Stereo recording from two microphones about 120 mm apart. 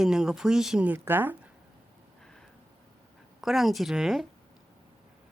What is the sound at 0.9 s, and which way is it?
Speech, 20° right (ahead or behind).